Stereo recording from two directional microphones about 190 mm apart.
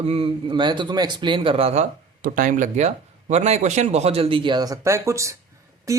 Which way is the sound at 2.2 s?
45° right (ahead or behind).